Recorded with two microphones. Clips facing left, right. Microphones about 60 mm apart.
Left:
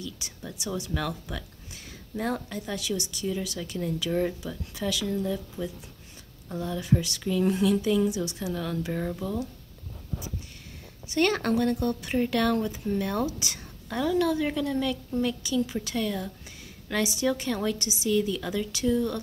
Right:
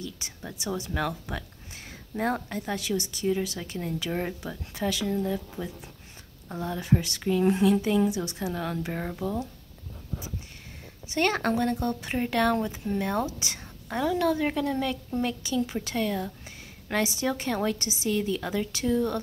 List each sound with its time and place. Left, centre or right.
0.4 s a woman's voice: right
11.1 s speech: right
14.2 s a woman's voice: right